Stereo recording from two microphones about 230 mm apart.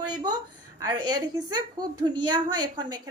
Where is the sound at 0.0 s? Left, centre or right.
Centre.